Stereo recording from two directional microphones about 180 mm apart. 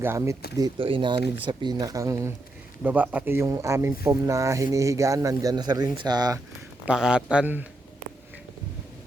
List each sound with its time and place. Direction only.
0.0 s speech: 15° right (ahead or behind)
0.5 s speech: 25° right (ahead or behind)
6.8 s speech: 5° right (ahead or behind)